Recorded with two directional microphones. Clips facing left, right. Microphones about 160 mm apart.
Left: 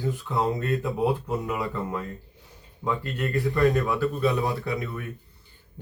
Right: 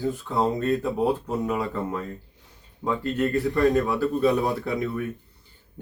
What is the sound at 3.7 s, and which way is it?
Speech, 30° right (ahead or behind).